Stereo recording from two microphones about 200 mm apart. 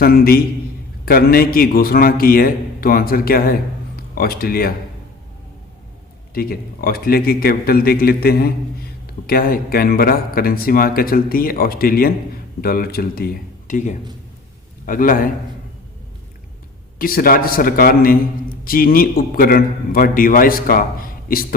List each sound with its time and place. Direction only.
0.0 s a man's voice: 50° left (ahead or behind)
6.3 s a man's voice: 50° left (ahead or behind)
17.0 s a man's voice: 45° left (ahead or behind)